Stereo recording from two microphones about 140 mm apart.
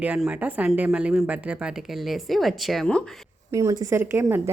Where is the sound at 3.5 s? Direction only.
20° right (ahead or behind).